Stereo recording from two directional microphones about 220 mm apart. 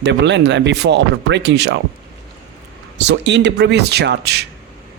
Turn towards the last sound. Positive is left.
turn(degrees=-50)  # may be behind; listen again after turning